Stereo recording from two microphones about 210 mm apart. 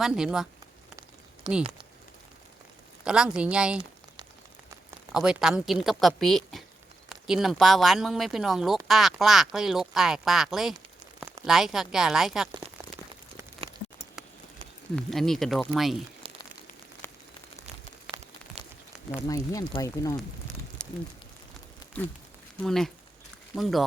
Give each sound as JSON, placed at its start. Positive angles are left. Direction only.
{"t": 0.0, "sound": "speech", "side_deg": -5}
{"t": 1.5, "sound": "speech", "side_deg": -20}
{"t": 3.0, "sound": "speech", "side_deg": -5}
{"t": 5.1, "sound": "speech", "side_deg": -5}
{"t": 14.9, "sound": "speech", "side_deg": 0}
{"t": 16.2, "sound": "a sound", "side_deg": -25}
{"t": 17.0, "sound": "a sound", "side_deg": 10}
{"t": 19.1, "sound": "speech", "side_deg": 15}
{"t": 22.6, "sound": "speech", "side_deg": 0}